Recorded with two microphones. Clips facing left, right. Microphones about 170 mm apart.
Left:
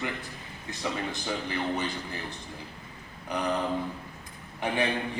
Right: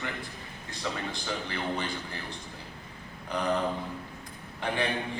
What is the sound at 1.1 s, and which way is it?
Speech, 20° left (ahead or behind).